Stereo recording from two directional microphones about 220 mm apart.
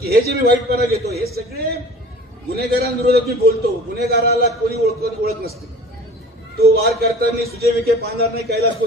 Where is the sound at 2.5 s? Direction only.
45° right (ahead or behind).